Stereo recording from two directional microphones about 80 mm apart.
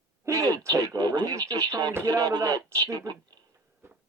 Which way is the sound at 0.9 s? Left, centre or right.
Right.